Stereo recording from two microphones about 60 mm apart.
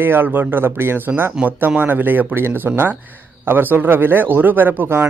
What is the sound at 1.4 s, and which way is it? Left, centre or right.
A man's voice, right.